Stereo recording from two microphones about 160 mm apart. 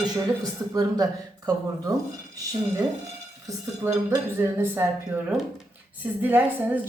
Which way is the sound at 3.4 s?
20° right (ahead or behind).